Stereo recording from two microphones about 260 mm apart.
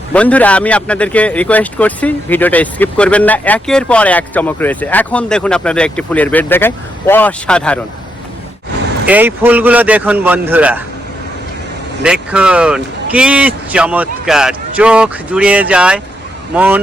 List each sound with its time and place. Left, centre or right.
0.1 s speech: centre
9.0 s a man's voice: centre
12.0 s a man's voice: centre